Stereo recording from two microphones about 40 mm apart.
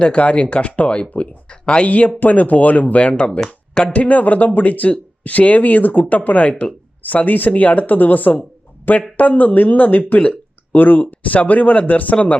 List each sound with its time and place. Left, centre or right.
0.0 s speech: left
1.9 s speech: left
7.0 s speech: left
10.2 s a sound: left
10.8 s speech: left
11.0 s speech: left